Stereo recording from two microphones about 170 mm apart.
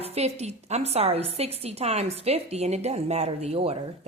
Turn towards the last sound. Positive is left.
turn(degrees=-35)  # may be behind; listen again after turning